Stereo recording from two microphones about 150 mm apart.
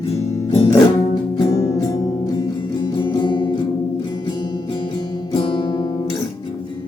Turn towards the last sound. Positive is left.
turn(degrees=30)  # may be behind; listen again after turning